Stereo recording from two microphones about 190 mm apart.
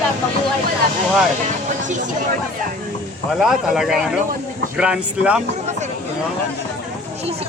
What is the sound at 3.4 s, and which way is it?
Speech, centre (ahead or behind).